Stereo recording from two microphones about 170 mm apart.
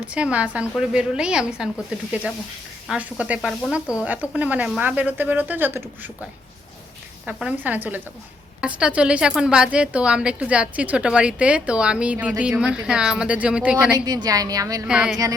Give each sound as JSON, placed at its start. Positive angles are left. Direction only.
{"t": 0.0, "sound": "a woman's voice", "side_deg": -5}
{"t": 2.8, "sound": "a woman's voice", "side_deg": -5}
{"t": 7.3, "sound": "speech", "side_deg": -5}
{"t": 14.0, "sound": "a woman's voice", "side_deg": -20}
{"t": 14.8, "sound": "a woman's voice", "side_deg": -5}